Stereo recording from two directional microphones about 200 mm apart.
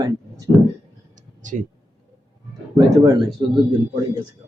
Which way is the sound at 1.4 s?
40° right (ahead or behind).